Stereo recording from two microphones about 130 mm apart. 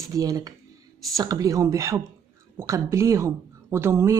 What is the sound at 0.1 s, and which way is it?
Speech, 25° right (ahead or behind).